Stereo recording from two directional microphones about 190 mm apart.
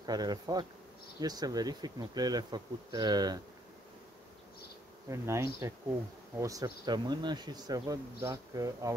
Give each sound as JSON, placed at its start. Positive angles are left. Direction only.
{"t": 0.0, "sound": "speech", "side_deg": -20}
{"t": 5.1, "sound": "bee", "side_deg": -15}
{"t": 6.4, "sound": "speech", "side_deg": -20}